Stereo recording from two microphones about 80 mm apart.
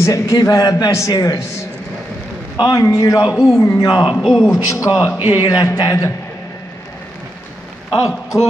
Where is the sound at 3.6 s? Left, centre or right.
Left.